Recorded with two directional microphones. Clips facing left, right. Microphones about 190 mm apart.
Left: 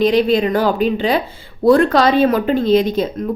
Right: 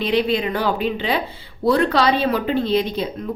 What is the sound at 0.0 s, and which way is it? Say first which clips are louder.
Speech: left 6 dB; 45° left (ahead or behind).